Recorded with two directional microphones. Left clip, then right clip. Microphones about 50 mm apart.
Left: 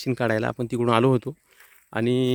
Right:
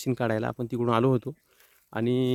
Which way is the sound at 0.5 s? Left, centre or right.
Left.